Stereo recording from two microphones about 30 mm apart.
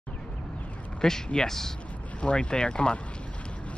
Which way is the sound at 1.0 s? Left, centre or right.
Centre.